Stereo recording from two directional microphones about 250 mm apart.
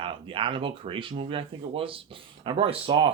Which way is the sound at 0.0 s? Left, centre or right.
Right.